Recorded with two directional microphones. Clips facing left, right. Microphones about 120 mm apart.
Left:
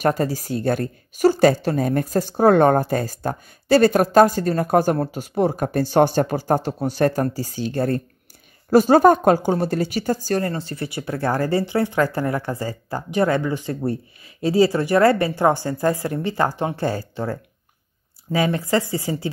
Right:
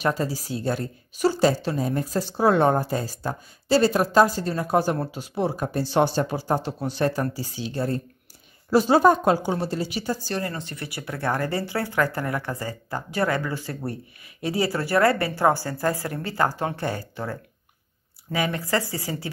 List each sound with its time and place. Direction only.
0.0 s speech: 50° left (ahead or behind)
10.5 s speech: 35° left (ahead or behind)